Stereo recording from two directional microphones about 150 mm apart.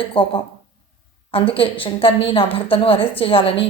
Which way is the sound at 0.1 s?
35° left (ahead or behind).